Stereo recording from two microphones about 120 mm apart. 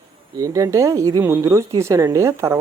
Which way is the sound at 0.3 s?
25° right (ahead or behind).